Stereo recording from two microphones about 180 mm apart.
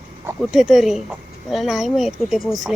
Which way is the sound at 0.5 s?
Centre (ahead or behind).